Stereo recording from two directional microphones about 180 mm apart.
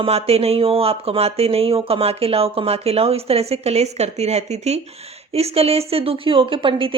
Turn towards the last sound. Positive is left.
turn(degrees=-30)  # may be behind; listen again after turning